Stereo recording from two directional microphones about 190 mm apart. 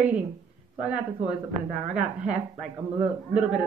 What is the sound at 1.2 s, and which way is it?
Speech, 35° right (ahead or behind).